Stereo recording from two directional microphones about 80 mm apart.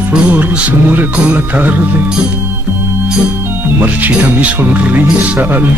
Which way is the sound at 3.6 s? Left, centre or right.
Right.